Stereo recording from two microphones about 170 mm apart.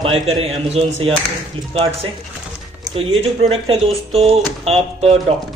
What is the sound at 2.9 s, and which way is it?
Speech, 35° right (ahead or behind).